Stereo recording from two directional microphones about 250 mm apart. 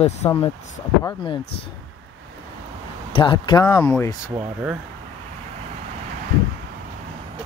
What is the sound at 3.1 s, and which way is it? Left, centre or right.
Speech, centre.